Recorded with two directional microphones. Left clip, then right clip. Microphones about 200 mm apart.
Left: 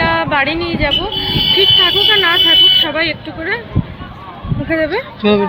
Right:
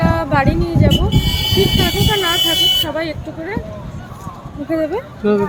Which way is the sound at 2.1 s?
10° right (ahead or behind).